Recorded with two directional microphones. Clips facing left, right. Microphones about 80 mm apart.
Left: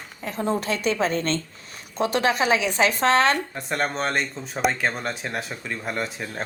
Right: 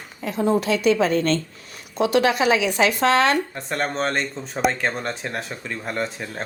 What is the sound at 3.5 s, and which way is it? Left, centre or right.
Speech, centre.